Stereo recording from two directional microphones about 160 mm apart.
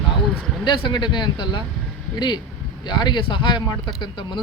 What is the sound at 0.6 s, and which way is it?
Speech, 30° left (ahead or behind).